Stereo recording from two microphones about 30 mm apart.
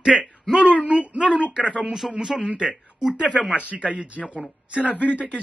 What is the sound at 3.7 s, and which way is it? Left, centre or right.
Speech, right.